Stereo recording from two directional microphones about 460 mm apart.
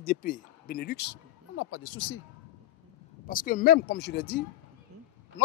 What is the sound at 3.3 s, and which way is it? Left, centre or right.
Speech, centre.